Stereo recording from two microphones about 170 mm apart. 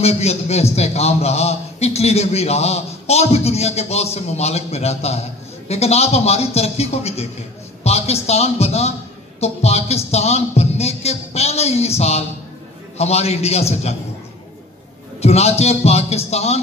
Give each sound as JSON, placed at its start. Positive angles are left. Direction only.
{"t": 0.0, "sound": "a man's voice", "side_deg": 40}
{"t": 15.2, "sound": "a man's voice", "side_deg": 40}